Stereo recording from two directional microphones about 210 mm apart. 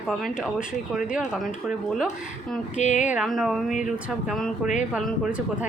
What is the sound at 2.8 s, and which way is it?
Speech, 35° left (ahead or behind).